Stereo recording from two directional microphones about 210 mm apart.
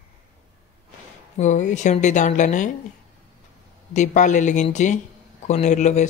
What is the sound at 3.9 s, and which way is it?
Speech, 35° left (ahead or behind).